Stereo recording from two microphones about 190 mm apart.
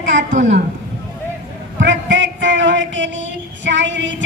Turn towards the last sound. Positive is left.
turn(degrees=-70)  # may be behind; listen again after turning